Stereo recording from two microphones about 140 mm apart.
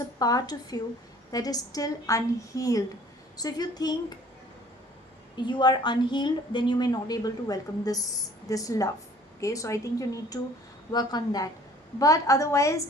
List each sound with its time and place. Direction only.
0.2 s a woman's voice: 30° left (ahead or behind)
5.4 s a woman's voice: 35° left (ahead or behind)